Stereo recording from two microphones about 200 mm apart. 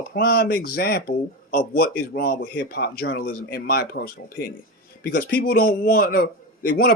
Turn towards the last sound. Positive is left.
turn(degrees=50)  # may be behind; listen again after turning